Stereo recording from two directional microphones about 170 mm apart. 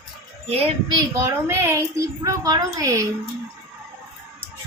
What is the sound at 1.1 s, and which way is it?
A woman's voice, 15° right (ahead or behind).